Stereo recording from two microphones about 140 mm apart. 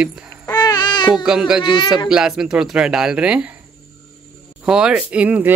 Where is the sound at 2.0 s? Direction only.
5° right (ahead or behind).